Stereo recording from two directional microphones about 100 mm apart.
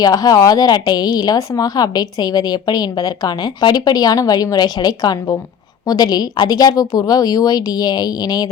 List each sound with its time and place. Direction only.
0.0 s speech: 40° left (ahead or behind)